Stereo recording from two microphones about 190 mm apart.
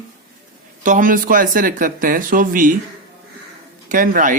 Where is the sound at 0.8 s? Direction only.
45° right (ahead or behind).